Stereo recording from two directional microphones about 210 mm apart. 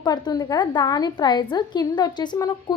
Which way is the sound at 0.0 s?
20° left (ahead or behind).